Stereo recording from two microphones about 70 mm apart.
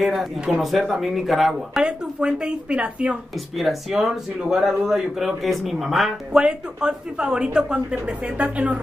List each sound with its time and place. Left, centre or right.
0.0 s speech: centre
1.8 s speech: centre
3.5 s speech: centre; by 8.7 s right